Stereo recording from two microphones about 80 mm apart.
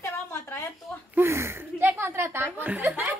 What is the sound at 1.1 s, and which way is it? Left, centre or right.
Speech, right.